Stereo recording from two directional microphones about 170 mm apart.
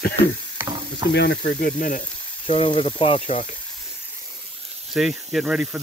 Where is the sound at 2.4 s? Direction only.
35° left (ahead or behind).